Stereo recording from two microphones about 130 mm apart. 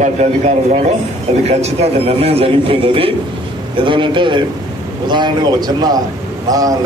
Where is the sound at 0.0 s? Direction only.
60° right (ahead or behind); by 6.9 s 30° right (ahead or behind).